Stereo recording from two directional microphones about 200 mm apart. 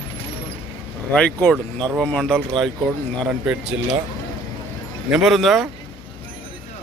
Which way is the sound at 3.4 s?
5° right (ahead or behind).